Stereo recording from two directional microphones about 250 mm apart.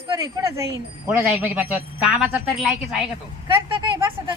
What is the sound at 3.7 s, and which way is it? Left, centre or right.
Speech, centre.